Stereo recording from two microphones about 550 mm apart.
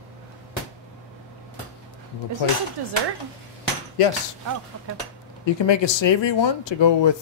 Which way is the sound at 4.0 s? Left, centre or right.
Left.